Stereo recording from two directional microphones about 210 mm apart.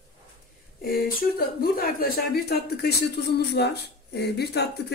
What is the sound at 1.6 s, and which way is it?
Speech, 45° left (ahead or behind).